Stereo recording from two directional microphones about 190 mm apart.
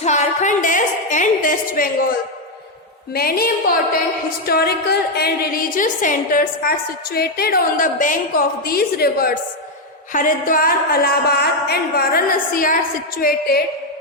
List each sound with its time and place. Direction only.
0.0 s a woman's voice: 40° left (ahead or behind)
3.2 s a woman's voice: 50° left (ahead or behind)